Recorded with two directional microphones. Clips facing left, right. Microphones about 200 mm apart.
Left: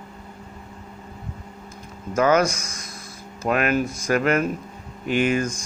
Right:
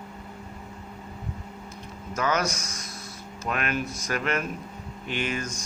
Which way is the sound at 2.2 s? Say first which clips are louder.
Left 8 dB; 50° left (ahead or behind).